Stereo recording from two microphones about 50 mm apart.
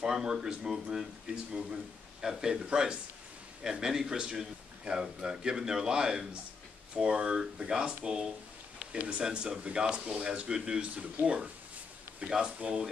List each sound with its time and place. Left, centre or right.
0.0 s speech: centre